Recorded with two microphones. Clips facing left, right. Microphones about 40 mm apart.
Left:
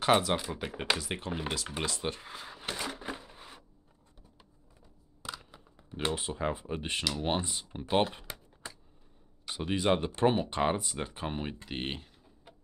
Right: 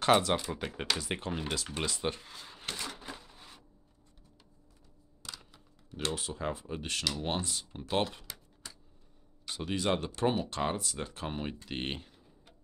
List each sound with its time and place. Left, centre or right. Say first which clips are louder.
0.0 s speech: even; centre
2.2 s speech: left 5 dB; left
2.7 s a sound: left 4 dB; centre
5.2 s camera: left 5 dB; centre
7.2 s speech: left 3 dB; centre